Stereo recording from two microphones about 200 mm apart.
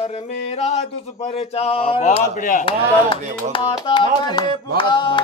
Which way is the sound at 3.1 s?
25° left (ahead or behind).